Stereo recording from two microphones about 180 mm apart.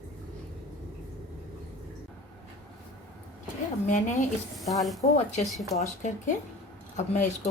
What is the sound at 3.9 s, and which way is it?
Speech, 45° left (ahead or behind).